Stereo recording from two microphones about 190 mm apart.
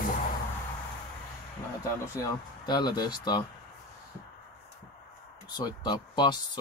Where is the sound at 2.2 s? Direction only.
25° left (ahead or behind).